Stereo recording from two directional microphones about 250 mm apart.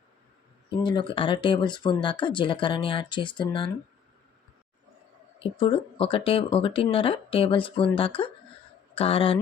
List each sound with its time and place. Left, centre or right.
0.8 s speech: centre
5.4 s speech: left